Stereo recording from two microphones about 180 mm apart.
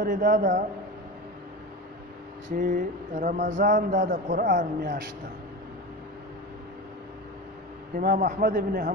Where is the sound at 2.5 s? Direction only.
50° right (ahead or behind).